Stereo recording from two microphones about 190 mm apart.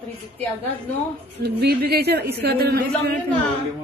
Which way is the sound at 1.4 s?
60° right (ahead or behind).